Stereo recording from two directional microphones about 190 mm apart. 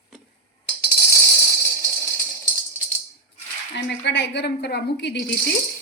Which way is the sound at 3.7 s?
65° left (ahead or behind).